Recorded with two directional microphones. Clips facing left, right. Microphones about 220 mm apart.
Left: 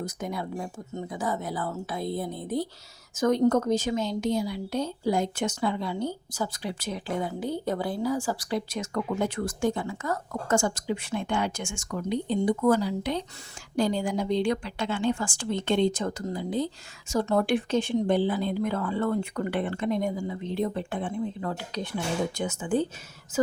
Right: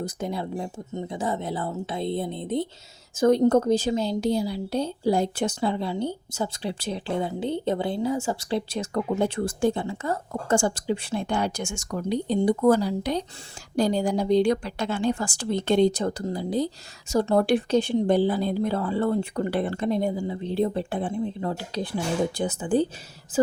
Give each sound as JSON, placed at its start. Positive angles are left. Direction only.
{"t": 0.0, "sound": "a woman's voice", "side_deg": -30}